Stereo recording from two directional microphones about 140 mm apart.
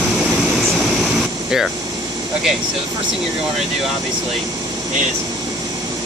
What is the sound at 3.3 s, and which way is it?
Speech, 5° right (ahead or behind).